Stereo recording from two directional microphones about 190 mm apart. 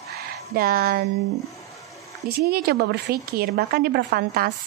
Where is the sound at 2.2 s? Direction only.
55° right (ahead or behind).